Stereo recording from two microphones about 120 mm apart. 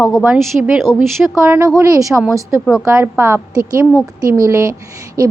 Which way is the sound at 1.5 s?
25° right (ahead or behind).